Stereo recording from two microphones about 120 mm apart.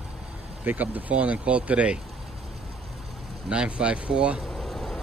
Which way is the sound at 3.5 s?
10° right (ahead or behind).